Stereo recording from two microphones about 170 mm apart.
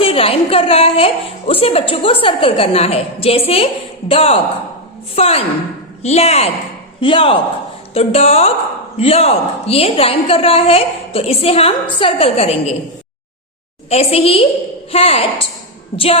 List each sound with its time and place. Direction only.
0.0 s a woman's voice: 35° left (ahead or behind)
13.9 s a woman's voice: 35° left (ahead or behind)